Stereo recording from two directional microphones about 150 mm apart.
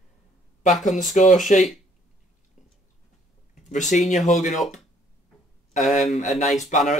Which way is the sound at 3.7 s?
55° left (ahead or behind).